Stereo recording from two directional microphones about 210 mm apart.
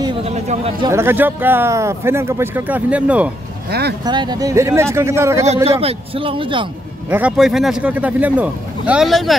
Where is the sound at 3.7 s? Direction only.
50° right (ahead or behind).